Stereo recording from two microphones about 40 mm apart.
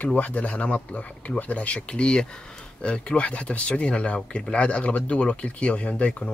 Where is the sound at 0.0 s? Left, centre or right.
Left.